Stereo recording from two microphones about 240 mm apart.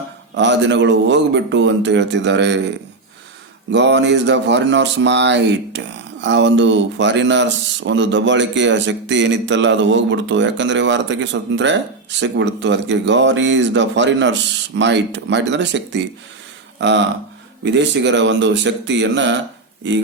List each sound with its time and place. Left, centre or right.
0.3 s speech: right
3.7 s speech: right